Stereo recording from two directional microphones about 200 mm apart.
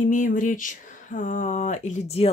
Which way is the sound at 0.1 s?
40° left (ahead or behind).